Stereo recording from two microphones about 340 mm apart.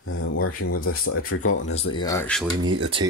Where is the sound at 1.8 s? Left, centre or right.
Centre.